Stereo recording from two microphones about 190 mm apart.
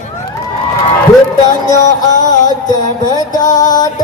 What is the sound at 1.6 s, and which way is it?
Music, 20° left (ahead or behind).